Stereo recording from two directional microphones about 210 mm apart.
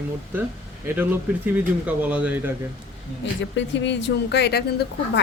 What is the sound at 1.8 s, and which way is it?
Speech, 5° right (ahead or behind).